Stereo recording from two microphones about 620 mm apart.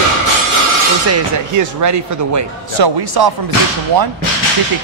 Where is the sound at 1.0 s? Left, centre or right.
Right.